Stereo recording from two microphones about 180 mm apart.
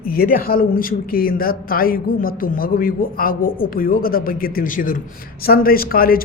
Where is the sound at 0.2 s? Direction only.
55° left (ahead or behind).